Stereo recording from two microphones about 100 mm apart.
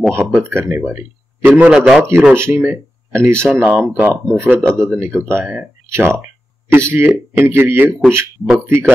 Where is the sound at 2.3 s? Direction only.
25° right (ahead or behind).